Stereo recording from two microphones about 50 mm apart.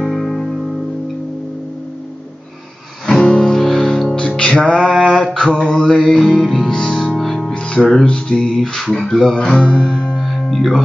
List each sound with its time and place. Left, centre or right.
0.0 s music: centre
3.1 s music: centre
4.8 s a sound: centre
5.8 s music: centre
7.5 s music: left
9.7 s music: left
10.1 s music: centre